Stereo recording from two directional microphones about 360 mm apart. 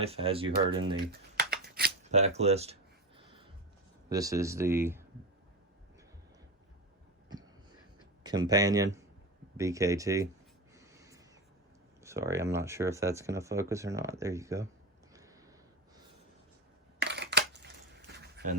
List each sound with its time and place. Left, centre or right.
0.0 s speech: centre
0.9 s speech: right
4.1 s speech: centre
8.2 s speech: centre
10.8 s snort: centre
12.0 s speech: centre
15.1 s a sound: centre
17.0 s a sound: right